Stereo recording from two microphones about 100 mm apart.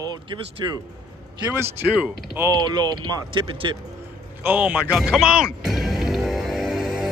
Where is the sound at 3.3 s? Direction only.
55° right (ahead or behind).